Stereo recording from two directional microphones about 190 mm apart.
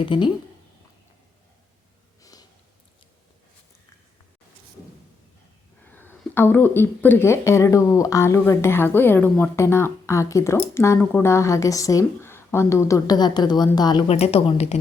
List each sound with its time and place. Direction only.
0.0 s speech: 25° left (ahead or behind)
5.8 s speech: 10° left (ahead or behind)
14.1 s speech: 30° left (ahead or behind)